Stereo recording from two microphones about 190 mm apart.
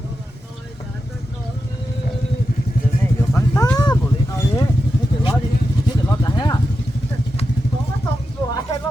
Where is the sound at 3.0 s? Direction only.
15° left (ahead or behind).